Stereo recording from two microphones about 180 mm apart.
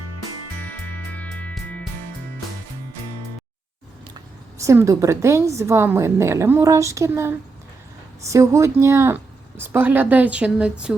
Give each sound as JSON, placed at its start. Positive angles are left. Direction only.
{"t": 1.2, "sound": "music", "side_deg": 10}
{"t": 4.6, "sound": "a woman's voice", "side_deg": -15}